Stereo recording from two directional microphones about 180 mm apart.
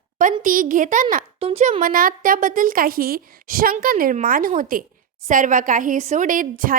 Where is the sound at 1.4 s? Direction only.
30° right (ahead or behind).